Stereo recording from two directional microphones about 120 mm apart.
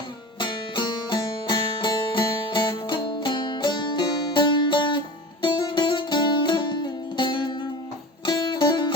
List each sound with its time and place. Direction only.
0.3 s music: 40° left (ahead or behind)